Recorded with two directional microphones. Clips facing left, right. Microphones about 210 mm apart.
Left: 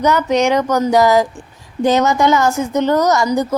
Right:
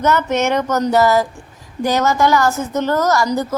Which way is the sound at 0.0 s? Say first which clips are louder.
Left 2 dB; 15° left (ahead or behind).